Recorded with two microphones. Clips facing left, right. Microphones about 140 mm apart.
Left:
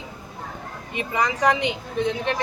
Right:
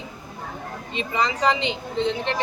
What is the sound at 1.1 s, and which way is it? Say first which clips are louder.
Speech: left 1 dB; 15° left (ahead or behind).